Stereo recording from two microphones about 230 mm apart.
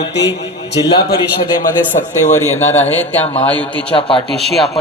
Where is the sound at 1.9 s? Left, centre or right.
Left.